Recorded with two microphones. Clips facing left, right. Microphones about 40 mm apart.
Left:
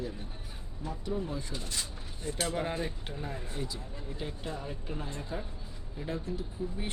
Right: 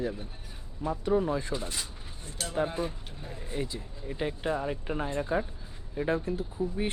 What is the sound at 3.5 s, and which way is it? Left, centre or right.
Speech, right.